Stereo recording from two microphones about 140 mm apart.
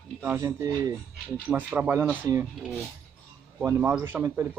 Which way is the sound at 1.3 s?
10° right (ahead or behind).